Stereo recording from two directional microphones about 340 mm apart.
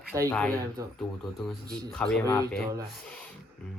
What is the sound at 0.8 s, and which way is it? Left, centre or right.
Speech, centre.